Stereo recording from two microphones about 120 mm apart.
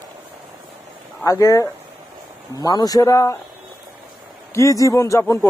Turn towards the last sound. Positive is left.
turn(degrees=20)  # may be behind; listen again after turning